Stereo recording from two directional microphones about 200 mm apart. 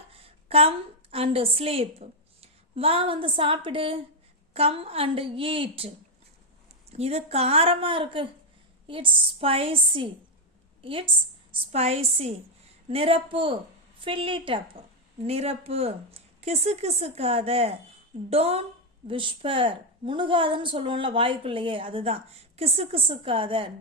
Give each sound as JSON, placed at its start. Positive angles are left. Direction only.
{"t": 0.1, "sound": "a woman's voice", "side_deg": -30}
{"t": 6.9, "sound": "a woman's voice", "side_deg": -30}